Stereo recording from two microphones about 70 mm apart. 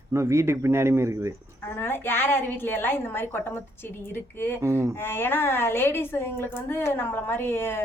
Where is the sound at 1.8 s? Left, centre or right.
Left.